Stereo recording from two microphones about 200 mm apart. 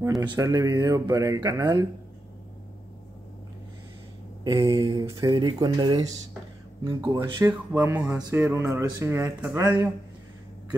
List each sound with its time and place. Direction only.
0.2 s speech: 20° right (ahead or behind)
4.5 s speech: 20° right (ahead or behind)